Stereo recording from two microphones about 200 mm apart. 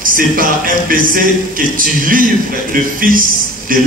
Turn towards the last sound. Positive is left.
turn(degrees=-45)  # may be behind; listen again after turning